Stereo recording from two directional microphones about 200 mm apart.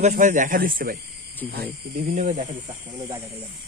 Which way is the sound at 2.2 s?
35° right (ahead or behind).